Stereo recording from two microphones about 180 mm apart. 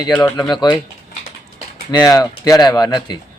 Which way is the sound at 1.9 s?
20° left (ahead or behind).